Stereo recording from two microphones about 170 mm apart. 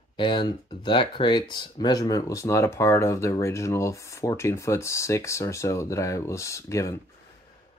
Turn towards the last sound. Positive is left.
turn(degrees=20)  # may be behind; listen again after turning